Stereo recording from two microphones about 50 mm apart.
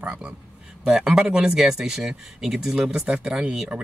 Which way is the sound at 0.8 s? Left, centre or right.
Centre.